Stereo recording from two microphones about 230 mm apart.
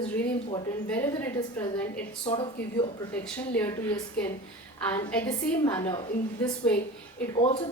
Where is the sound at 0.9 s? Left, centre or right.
Centre.